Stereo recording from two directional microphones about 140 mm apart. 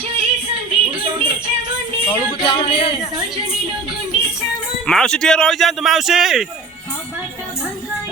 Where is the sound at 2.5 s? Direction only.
40° left (ahead or behind).